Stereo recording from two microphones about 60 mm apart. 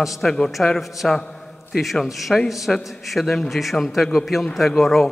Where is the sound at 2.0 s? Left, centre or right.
Centre.